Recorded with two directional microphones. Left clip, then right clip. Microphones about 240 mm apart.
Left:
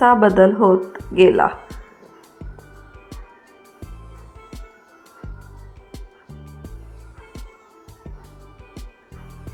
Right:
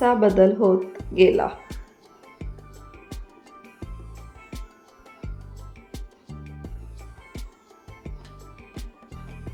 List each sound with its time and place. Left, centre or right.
0.0 s speech: centre
5.9 s music: centre